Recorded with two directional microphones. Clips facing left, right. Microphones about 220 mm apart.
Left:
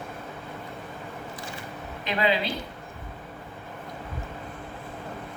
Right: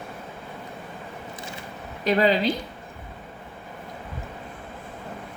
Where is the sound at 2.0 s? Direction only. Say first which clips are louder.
Right 6 dB; 40° right (ahead or behind).